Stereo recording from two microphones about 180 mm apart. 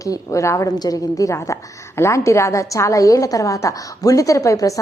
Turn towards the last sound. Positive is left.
turn(degrees=15)  # may be behind; listen again after turning